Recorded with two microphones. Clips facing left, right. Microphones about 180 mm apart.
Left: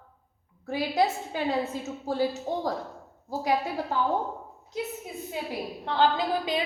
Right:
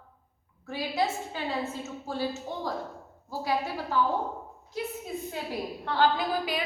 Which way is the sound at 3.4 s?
20° left (ahead or behind).